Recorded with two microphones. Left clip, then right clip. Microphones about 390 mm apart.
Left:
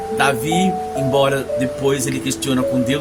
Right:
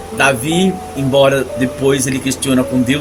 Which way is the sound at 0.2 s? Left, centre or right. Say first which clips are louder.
Right 4 dB; left.